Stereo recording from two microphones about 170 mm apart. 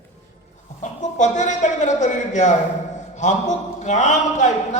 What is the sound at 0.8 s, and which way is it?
A woman's voice, 45° left (ahead or behind).